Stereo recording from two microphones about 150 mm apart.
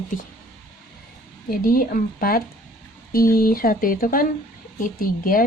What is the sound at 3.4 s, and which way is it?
Speech, 75° left (ahead or behind).